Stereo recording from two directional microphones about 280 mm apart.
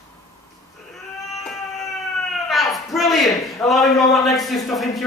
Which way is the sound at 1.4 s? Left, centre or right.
Centre.